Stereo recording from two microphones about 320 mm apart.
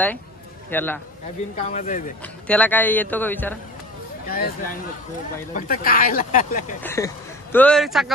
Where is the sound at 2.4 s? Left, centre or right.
Centre.